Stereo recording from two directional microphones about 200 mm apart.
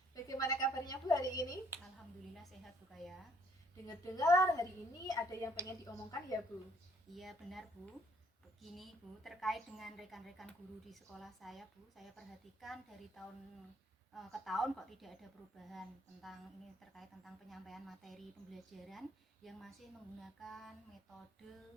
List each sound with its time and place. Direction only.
0.1 s a woman's voice: 15° left (ahead or behind)
2.9 s a woman's voice: centre (ahead or behind)
3.8 s a woman's voice: 20° left (ahead or behind)
7.2 s a woman's voice: centre (ahead or behind)
8.7 s a woman's voice: centre (ahead or behind)